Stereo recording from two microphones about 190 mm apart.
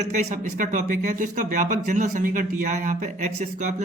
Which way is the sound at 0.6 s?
45° right (ahead or behind).